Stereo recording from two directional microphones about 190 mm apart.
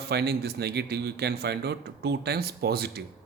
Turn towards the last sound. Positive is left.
turn(degrees=-55)  # may be behind; listen again after turning